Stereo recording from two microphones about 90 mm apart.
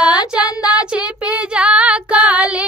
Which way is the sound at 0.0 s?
50° left (ahead or behind).